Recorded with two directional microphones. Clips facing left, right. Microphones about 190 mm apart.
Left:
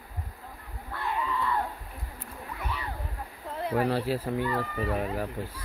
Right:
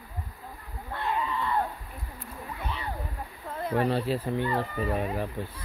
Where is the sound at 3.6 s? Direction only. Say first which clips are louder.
Even; 5° left (ahead or behind).